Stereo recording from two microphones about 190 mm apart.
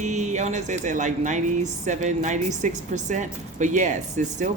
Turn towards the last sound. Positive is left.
turn(degrees=-40)  # may be behind; listen again after turning